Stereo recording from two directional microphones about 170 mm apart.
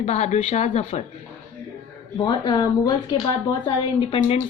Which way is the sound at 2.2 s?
25° left (ahead or behind).